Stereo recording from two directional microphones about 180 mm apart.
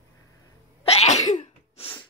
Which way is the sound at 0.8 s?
35° left (ahead or behind).